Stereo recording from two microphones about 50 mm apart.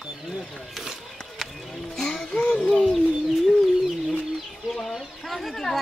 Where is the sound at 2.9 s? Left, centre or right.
Centre.